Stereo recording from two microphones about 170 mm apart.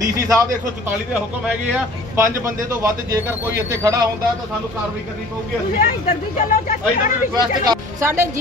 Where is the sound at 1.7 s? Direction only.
15° right (ahead or behind).